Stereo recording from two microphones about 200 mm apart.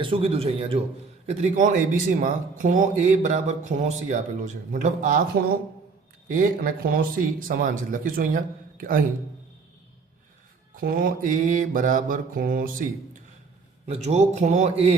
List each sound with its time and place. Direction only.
0.0 s a man's voice: 25° right (ahead or behind); by 9.0 s 45° right (ahead or behind)
10.8 s speech: 45° right (ahead or behind)
13.8 s speech: 30° right (ahead or behind)